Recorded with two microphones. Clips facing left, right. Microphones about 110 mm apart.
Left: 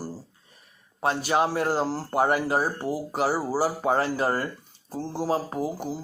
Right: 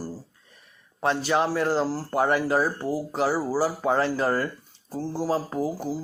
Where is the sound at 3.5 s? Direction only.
45° left (ahead or behind).